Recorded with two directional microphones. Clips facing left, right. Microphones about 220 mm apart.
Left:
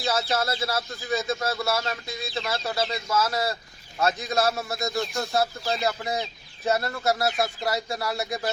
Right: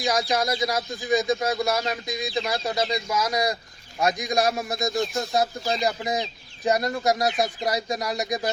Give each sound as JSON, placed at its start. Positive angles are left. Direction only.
{"t": 0.0, "sound": "speech", "side_deg": -15}